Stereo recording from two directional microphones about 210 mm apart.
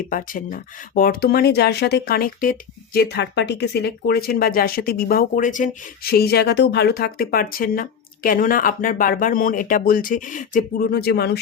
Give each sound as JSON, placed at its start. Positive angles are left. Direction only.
{"t": 0.1, "sound": "speech", "side_deg": 40}